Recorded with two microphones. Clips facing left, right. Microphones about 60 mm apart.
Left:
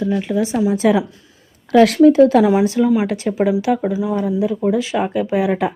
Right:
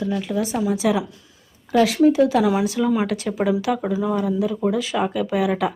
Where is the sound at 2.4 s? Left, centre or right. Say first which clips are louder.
Left 5 dB; left.